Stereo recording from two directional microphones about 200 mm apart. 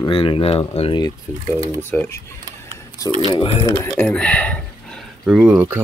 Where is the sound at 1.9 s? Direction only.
10° left (ahead or behind).